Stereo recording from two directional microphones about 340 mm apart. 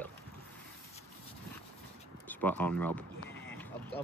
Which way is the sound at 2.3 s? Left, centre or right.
Centre.